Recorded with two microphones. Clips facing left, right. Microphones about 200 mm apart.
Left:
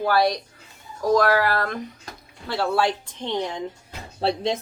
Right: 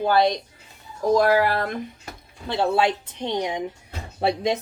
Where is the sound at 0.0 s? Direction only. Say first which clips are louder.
Right 1 dB; 20° right (ahead or behind).